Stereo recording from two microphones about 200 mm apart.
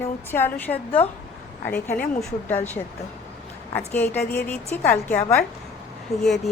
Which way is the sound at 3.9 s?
10° left (ahead or behind).